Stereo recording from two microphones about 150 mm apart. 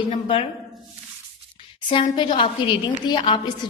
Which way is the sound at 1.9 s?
35° left (ahead or behind).